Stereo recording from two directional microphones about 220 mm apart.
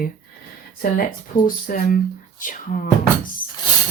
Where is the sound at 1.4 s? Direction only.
40° left (ahead or behind).